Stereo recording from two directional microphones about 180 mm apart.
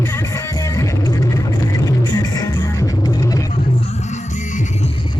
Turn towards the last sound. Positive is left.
turn(degrees=20)  # may be behind; listen again after turning